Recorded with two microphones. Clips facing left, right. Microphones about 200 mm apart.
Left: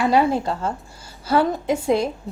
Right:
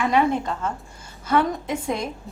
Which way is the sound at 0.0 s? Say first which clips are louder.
Left 2 dB; 35° left (ahead or behind).